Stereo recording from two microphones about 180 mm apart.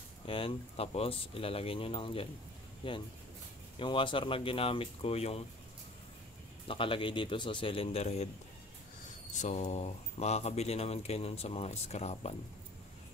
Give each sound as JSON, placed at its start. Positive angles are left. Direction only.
{"t": 0.3, "sound": "speech", "side_deg": 30}
{"t": 6.7, "sound": "speech", "side_deg": 30}
{"t": 9.3, "sound": "speech", "side_deg": 40}